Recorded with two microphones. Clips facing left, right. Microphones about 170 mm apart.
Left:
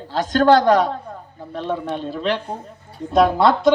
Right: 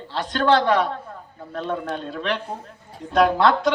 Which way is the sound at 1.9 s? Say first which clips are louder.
Left 4 dB; 5° left (ahead or behind).